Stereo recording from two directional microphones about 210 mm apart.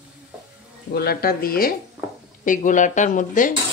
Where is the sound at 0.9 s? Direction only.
50° left (ahead or behind).